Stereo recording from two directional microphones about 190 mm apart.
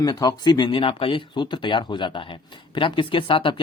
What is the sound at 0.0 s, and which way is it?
Speech, 20° left (ahead or behind).